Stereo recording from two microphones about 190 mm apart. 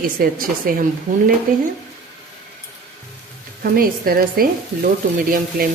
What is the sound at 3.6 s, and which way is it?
A woman's voice, 50° right (ahead or behind).